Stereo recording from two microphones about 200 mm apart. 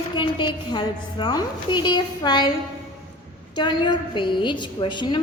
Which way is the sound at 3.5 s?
20° left (ahead or behind).